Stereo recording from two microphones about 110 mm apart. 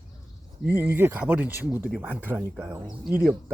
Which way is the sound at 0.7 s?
20° right (ahead or behind).